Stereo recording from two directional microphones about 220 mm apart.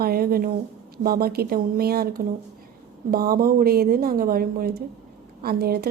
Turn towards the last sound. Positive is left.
turn(degrees=-45)  # may be behind; listen again after turning